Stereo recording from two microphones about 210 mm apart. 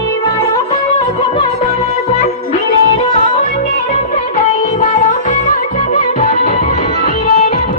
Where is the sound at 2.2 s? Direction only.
30° left (ahead or behind).